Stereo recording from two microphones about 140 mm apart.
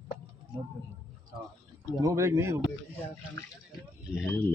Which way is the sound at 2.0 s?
20° right (ahead or behind).